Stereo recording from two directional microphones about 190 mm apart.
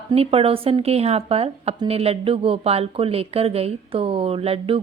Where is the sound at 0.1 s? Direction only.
30° right (ahead or behind).